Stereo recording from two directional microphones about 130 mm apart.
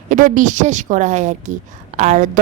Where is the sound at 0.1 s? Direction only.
90° right.